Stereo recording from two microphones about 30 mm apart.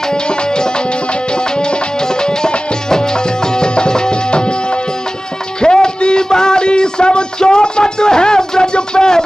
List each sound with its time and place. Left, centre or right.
0.1 s tabla: left
1.3 s music: left